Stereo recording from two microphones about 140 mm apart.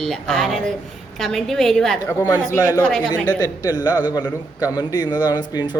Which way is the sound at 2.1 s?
25° left (ahead or behind).